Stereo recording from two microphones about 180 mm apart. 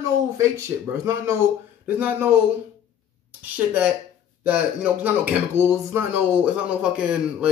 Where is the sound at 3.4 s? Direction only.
10° right (ahead or behind).